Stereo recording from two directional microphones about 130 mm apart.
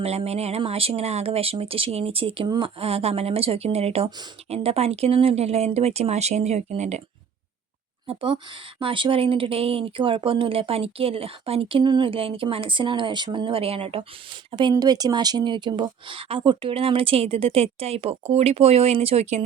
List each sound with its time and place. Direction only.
0.0 s speech: 55° right (ahead or behind)
8.0 s speech: 40° right (ahead or behind)
14.5 s speech: 35° right (ahead or behind); by 19.5 s 60° right (ahead or behind)